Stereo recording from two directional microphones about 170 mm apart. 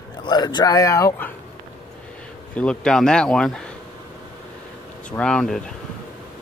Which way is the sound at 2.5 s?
5° left (ahead or behind).